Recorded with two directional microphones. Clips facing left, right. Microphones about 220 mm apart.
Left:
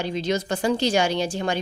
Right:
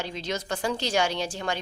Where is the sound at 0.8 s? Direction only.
Centre (ahead or behind).